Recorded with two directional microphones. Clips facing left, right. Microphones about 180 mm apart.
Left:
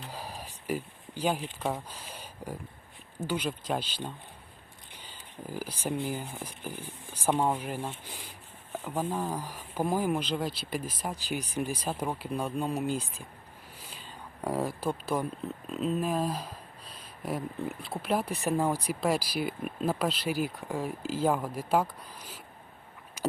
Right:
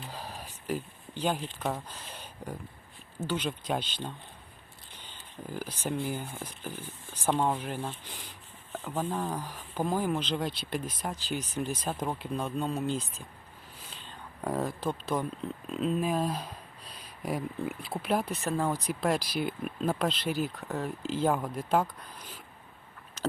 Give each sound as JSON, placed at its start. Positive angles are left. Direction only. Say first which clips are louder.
{"t": 0.1, "sound": "a sound", "louder": "left 1 dB", "side_deg": 10}
{"t": 3.2, "sound": "speech", "louder": "even", "side_deg": 10}
{"t": 18.4, "sound": "speech", "louder": "left 2 dB", "side_deg": 15}